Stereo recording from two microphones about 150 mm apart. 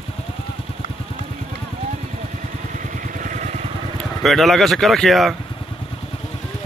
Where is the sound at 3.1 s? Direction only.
60° right (ahead or behind).